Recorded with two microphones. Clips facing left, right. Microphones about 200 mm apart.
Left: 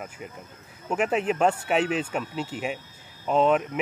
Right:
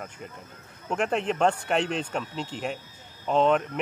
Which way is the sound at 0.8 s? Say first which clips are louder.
Left 2 dB; 5° left (ahead or behind).